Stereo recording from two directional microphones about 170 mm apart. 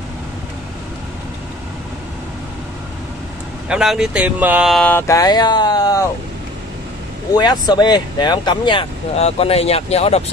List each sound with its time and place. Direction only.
3.6 s speech: 5° right (ahead or behind); by 6.0 s 20° left (ahead or behind)
7.3 s speech: 25° left (ahead or behind)